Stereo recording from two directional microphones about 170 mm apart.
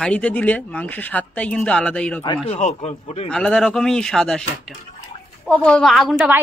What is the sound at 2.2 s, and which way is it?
Speech, 35° left (ahead or behind).